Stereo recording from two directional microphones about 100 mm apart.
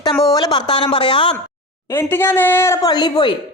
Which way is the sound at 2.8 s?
45° left (ahead or behind).